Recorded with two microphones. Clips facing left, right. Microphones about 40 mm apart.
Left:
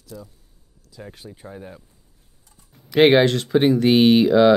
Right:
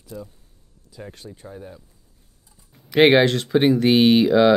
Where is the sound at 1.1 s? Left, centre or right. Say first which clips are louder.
Left 3 dB; centre.